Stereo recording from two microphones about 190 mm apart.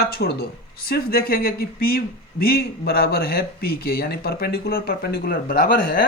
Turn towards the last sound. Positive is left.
turn(degrees=50)  # may be behind; listen again after turning